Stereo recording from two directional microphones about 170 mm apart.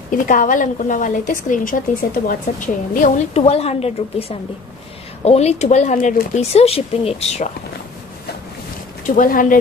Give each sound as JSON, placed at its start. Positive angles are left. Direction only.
{"t": 0.1, "sound": "a woman's voice", "side_deg": 50}
{"t": 9.1, "sound": "a woman's voice", "side_deg": 55}